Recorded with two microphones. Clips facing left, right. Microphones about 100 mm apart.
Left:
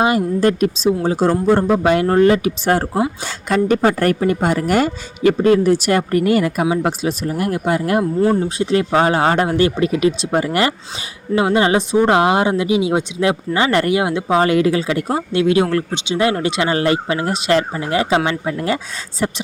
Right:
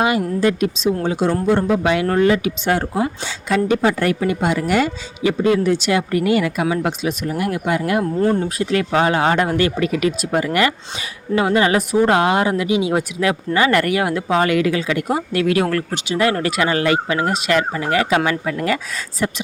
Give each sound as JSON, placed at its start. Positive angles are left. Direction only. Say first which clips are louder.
{"t": 0.3, "sound": "speech", "louder": "left 2 dB", "side_deg": 45}
{"t": 8.2, "sound": "speech", "louder": "left 2 dB", "side_deg": 5}
{"t": 8.4, "sound": "speech", "louder": "left 2 dB", "side_deg": 30}